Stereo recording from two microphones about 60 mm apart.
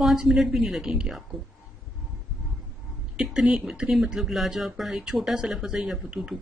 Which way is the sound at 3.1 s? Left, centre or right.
Centre.